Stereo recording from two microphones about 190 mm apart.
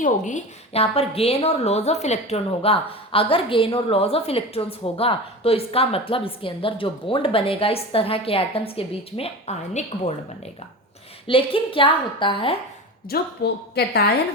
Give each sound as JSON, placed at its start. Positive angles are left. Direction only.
{"t": 0.0, "sound": "a woman's voice", "side_deg": 40}
{"t": 11.3, "sound": "a woman's voice", "side_deg": 30}
{"t": 13.1, "sound": "a woman's voice", "side_deg": 60}